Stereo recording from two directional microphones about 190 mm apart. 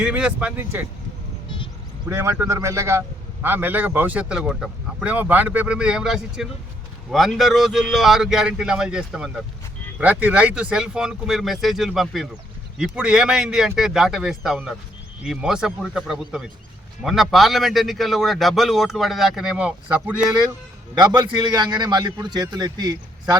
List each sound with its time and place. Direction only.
0.0 s speech: 5° right (ahead or behind)
2.0 s a man's voice: 15° right (ahead or behind)
20.9 s a man's voice: 20° right (ahead or behind)